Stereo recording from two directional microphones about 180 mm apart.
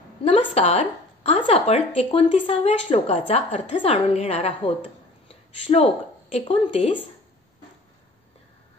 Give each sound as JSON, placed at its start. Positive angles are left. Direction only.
{"t": 0.2, "sound": "a woman's voice", "side_deg": 35}
{"t": 5.3, "sound": "a sound", "side_deg": 35}
{"t": 6.3, "sound": "a woman's voice", "side_deg": 30}